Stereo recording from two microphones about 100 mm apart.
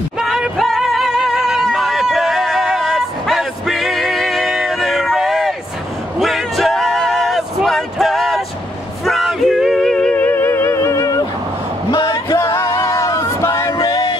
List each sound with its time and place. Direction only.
0.2 s music: 5° right (ahead or behind)
9.0 s male singing: centre (ahead or behind)
10.1 s music: 20° left (ahead or behind)
11.9 s a sound: 45° left (ahead or behind)
12.5 s music: 30° left (ahead or behind)